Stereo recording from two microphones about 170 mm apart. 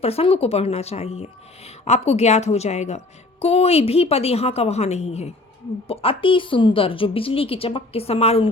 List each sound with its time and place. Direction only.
0.0 s speech: 35° left (ahead or behind)